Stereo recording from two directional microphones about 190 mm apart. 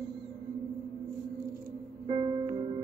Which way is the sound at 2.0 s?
30° right (ahead or behind).